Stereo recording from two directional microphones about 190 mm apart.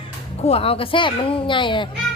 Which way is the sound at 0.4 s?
30° left (ahead or behind).